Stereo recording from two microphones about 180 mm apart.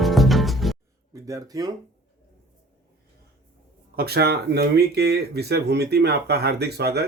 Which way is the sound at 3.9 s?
60° right (ahead or behind).